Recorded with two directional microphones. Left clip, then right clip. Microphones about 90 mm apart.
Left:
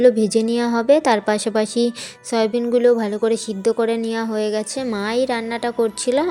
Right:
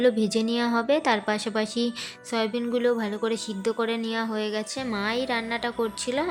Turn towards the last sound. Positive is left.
turn(degrees=50)  # may be behind; listen again after turning